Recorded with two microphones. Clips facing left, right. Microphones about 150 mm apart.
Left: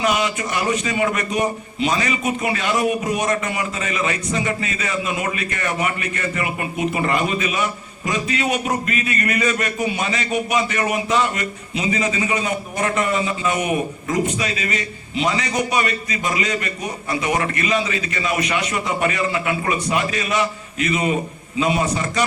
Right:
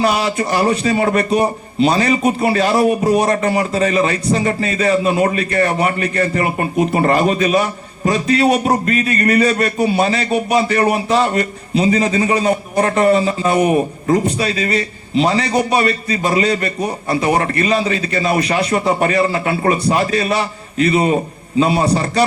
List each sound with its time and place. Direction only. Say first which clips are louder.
0.0 s a man's voice: right 4 dB; 35° right (ahead or behind)